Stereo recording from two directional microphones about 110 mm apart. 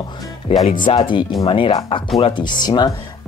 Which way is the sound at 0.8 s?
45° left (ahead or behind).